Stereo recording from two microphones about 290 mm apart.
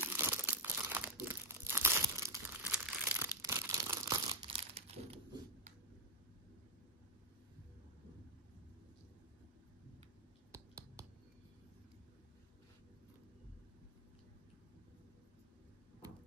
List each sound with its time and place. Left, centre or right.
0.0 s crumpling: centre
10.5 s clicking: centre